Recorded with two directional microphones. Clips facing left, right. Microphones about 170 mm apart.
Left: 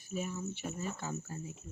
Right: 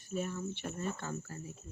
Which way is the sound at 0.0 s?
5° left (ahead or behind).